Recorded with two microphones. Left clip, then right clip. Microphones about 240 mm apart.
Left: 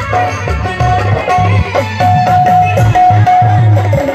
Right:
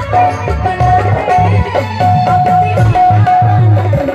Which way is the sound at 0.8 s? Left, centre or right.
Left.